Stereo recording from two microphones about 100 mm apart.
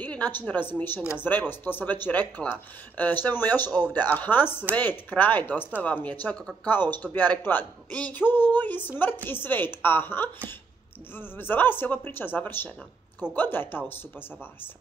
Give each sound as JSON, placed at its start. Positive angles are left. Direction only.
{"t": 0.0, "sound": "a sound", "side_deg": 15}
{"t": 0.5, "sound": "speech", "side_deg": 20}
{"t": 7.2, "sound": "speech", "side_deg": 20}